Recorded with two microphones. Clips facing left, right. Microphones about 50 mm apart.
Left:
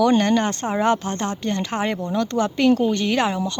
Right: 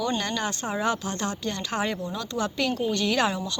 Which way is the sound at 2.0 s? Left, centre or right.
Left.